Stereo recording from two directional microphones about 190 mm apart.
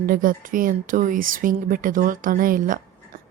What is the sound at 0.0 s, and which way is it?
Speech, 45° right (ahead or behind).